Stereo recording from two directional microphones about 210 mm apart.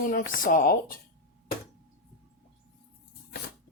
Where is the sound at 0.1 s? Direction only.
40° left (ahead or behind).